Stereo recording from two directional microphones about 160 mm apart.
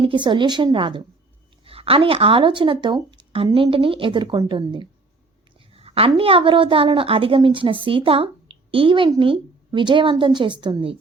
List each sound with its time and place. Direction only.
0.0 s a woman's voice: 30° right (ahead or behind)